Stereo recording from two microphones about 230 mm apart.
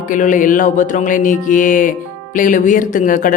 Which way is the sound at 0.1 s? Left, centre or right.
Left.